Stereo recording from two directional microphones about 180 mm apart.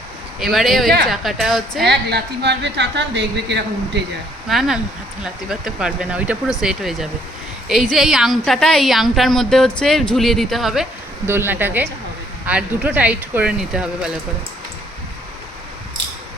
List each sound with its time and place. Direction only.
0.3 s a woman's voice: centre (ahead or behind)
1.9 s speech: 70° right (ahead or behind)
4.4 s a woman's voice: centre (ahead or behind)
11.3 s speech: 15° right (ahead or behind)